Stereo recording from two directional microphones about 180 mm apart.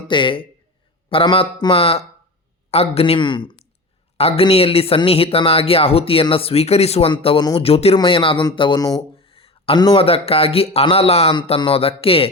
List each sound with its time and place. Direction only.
0.1 s speech: 25° left (ahead or behind)